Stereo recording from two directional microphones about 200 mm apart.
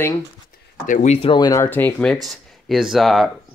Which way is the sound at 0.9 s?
40° left (ahead or behind).